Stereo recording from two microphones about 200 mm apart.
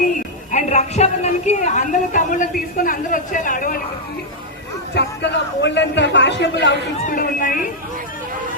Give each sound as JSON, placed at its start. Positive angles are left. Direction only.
{"t": 0.5, "sound": "speech", "side_deg": 35}
{"t": 4.9, "sound": "a man's voice", "side_deg": 60}